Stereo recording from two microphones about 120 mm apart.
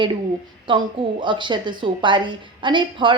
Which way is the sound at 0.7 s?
45° right (ahead or behind).